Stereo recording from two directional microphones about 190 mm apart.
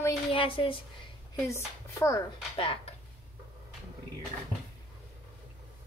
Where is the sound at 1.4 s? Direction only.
15° left (ahead or behind).